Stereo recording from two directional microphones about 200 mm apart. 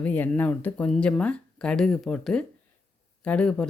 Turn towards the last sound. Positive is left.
turn(degrees=5)  # may be behind; listen again after turning